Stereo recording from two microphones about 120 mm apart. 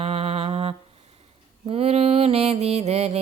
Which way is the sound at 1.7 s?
55° right (ahead or behind).